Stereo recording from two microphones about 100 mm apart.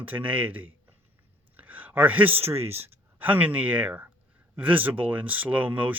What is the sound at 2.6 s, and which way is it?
Speech, 90° right.